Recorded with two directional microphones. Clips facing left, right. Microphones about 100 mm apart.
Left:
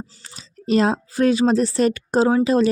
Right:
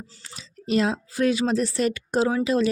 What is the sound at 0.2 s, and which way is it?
Speech, 35° left (ahead or behind).